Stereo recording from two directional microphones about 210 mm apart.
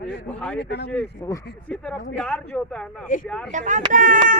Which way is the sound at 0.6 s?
55° left (ahead or behind).